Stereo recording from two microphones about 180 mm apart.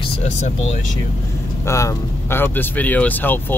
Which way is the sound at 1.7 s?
15° left (ahead or behind).